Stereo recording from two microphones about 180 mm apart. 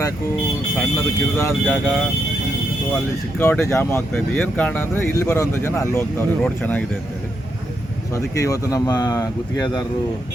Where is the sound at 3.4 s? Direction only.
10° left (ahead or behind).